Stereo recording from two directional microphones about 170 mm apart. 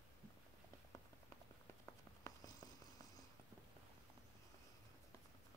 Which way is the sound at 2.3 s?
15° left (ahead or behind).